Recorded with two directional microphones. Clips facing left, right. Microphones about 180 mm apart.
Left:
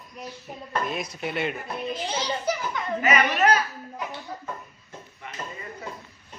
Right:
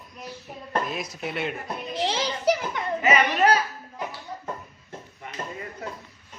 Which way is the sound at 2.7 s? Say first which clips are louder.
Right 1 dB; 25° right (ahead or behind).